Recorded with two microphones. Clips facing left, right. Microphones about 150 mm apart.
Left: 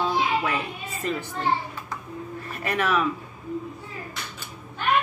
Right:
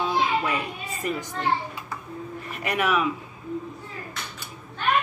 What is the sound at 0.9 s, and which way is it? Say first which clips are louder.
Speech: left 1 dB; 15° right (ahead or behind).